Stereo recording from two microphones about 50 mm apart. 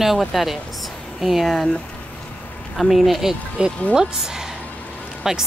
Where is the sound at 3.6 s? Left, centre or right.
Centre.